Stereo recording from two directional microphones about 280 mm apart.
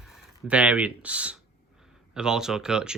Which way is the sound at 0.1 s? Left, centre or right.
Centre.